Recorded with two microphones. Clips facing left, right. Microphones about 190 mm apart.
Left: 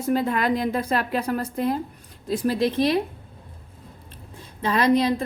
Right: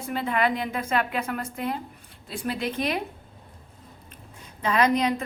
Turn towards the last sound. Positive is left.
turn(degrees=35)  # may be behind; listen again after turning